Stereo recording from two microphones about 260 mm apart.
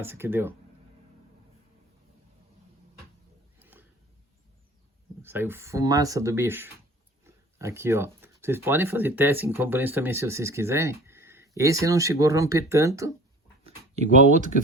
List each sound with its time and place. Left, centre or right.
0.0 s speech: centre
3.6 s a sound: centre
5.2 s speech: centre
13.7 s speech: right